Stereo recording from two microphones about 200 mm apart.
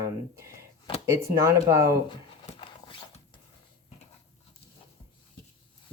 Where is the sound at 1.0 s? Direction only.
15° right (ahead or behind).